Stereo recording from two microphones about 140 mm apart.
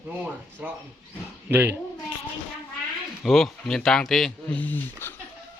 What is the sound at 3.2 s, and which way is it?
Speech, centre (ahead or behind).